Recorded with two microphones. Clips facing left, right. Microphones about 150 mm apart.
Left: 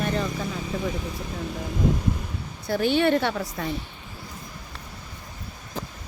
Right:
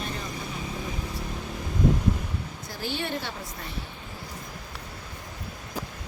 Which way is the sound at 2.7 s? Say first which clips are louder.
Left 11 dB; 65° left (ahead or behind).